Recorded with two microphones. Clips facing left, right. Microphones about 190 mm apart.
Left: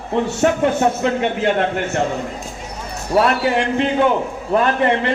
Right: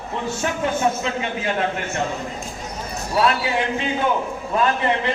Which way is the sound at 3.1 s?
60° left (ahead or behind).